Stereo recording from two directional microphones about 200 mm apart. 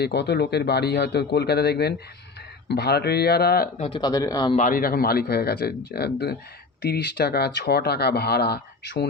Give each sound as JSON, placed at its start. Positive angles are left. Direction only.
{"t": 0.0, "sound": "speech", "side_deg": 55}
{"t": 3.8, "sound": "a man's voice", "side_deg": 20}
{"t": 4.5, "sound": "speech", "side_deg": 40}